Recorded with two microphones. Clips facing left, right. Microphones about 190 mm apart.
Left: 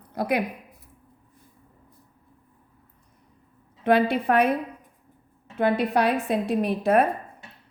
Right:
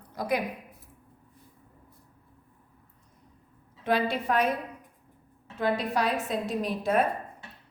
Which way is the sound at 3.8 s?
60° left (ahead or behind).